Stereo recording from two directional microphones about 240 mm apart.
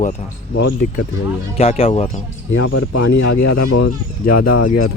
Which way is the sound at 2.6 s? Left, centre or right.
Left.